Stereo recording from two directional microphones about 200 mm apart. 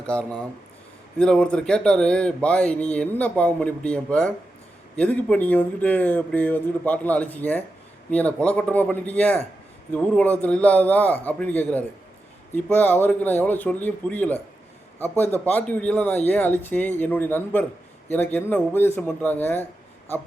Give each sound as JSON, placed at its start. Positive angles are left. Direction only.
{"t": 0.1, "sound": "speech", "side_deg": 5}